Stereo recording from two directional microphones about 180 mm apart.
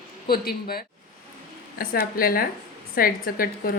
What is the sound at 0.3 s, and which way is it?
A woman's voice, 55° left (ahead or behind).